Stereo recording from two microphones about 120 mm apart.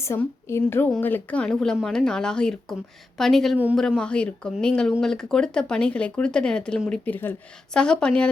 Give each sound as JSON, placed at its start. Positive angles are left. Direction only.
{"t": 0.0, "sound": "a woman's voice", "side_deg": 25}